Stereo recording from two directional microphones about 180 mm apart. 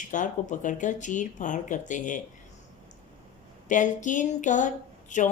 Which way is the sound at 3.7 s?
45° left (ahead or behind).